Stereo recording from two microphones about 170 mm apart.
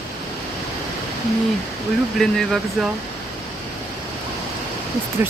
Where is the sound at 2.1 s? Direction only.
Centre (ahead or behind).